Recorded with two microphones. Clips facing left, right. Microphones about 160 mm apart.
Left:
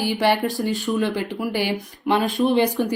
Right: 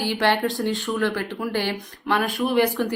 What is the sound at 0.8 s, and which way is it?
Speech, 15° left (ahead or behind).